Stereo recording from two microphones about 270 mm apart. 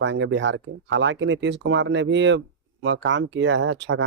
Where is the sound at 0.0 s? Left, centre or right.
Right.